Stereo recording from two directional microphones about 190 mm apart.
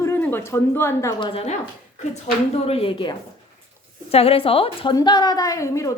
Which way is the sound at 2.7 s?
30° left (ahead or behind).